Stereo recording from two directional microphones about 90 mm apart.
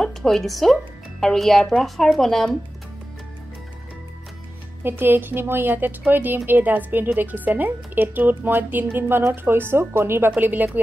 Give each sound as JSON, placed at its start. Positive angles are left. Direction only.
{"t": 0.0, "sound": "speech", "side_deg": 5}
{"t": 4.8, "sound": "a woman's voice", "side_deg": -25}